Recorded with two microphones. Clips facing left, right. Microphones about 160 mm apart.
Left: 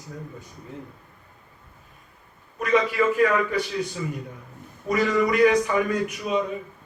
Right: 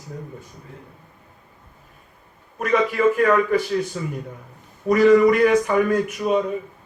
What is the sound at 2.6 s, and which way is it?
A man's voice, 50° right (ahead or behind).